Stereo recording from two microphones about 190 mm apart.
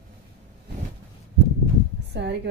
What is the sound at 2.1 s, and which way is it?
Speech, 65° right (ahead or behind).